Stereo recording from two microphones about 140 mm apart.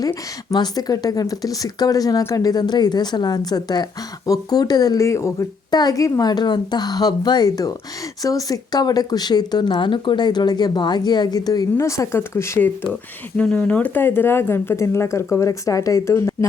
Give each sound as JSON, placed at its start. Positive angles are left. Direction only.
{"t": 0.0, "sound": "speech", "side_deg": 30}